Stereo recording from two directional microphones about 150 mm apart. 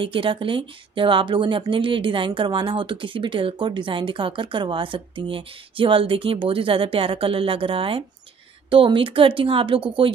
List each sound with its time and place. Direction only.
0.0 s a woman's voice: 35° right (ahead or behind)